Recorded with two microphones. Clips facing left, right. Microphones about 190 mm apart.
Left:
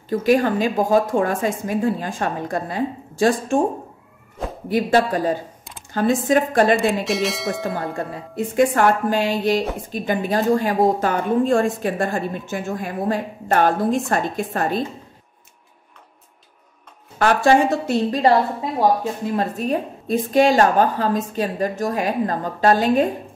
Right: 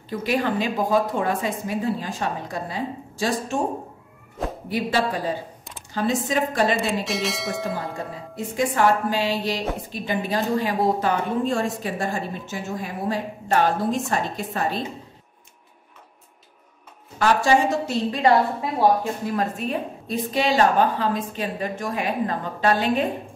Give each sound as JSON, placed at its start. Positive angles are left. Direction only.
{"t": 0.1, "sound": "a woman's voice", "side_deg": 45}
{"t": 4.6, "sound": "a woman's voice", "side_deg": 45}
{"t": 6.8, "sound": "speech", "side_deg": 0}
{"t": 7.7, "sound": "a woman's voice", "side_deg": 60}
{"t": 17.2, "sound": "speech", "side_deg": 55}
{"t": 18.1, "sound": "a woman's voice", "side_deg": 35}